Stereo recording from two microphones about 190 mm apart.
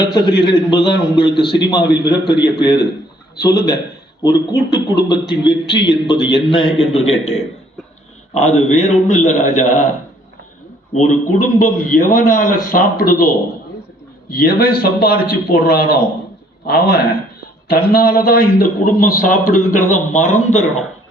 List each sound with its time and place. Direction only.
0.1 s a man's voice: 25° left (ahead or behind)
4.9 s a man's voice: 60° left (ahead or behind)
5.3 s a man's voice: 25° left (ahead or behind)
8.4 s a man's voice: 35° left (ahead or behind)
10.9 s a man's voice: 40° left (ahead or behind)
14.3 s a man's voice: 50° left (ahead or behind)